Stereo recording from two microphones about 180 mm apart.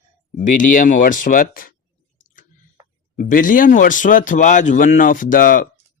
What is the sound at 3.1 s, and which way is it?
Speech, 50° left (ahead or behind).